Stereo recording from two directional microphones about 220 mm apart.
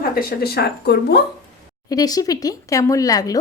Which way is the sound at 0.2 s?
45° left (ahead or behind).